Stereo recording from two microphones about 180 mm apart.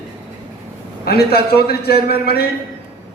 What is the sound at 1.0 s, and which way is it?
A man's voice, 60° left (ahead or behind).